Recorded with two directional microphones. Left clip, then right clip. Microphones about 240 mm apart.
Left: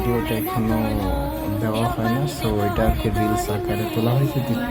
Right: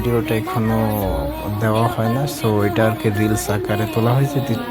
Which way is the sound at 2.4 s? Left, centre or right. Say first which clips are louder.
Right 5 dB; centre.